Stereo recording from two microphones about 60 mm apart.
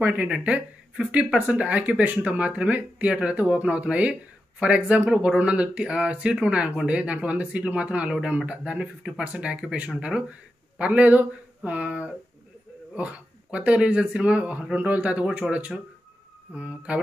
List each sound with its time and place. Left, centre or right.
0.0 s speech: right
15.4 s speech: centre
16.5 s speech: centre